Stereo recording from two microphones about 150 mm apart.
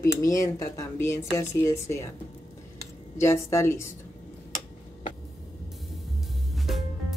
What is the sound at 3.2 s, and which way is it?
Speech, 20° left (ahead or behind).